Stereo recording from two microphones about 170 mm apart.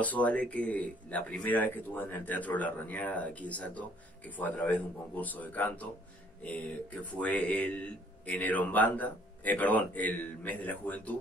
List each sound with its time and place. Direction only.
0.0 s speech: 10° left (ahead or behind)